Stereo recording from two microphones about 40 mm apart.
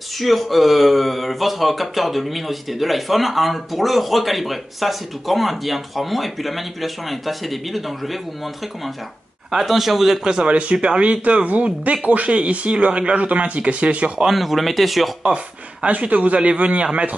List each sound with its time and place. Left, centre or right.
0.2 s speech: centre
9.5 s speech: centre
10.2 s speech: right
14.2 s speech: centre
15.3 s speech: right